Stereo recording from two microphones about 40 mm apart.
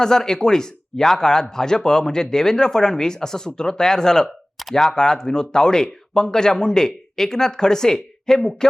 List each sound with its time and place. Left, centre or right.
0.0 s a man's voice: centre